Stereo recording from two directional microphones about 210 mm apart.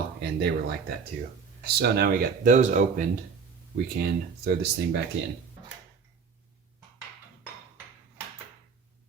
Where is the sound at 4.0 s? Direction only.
45° right (ahead or behind).